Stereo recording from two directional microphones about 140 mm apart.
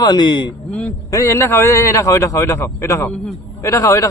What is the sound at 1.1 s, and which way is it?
A man's voice, 20° left (ahead or behind).